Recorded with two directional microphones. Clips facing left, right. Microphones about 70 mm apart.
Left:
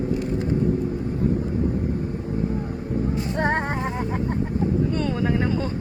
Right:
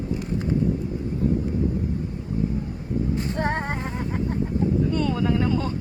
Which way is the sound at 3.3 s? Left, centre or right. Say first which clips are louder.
Left 3 dB; left.